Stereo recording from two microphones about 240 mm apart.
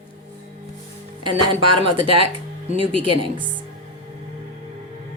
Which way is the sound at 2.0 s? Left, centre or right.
Right.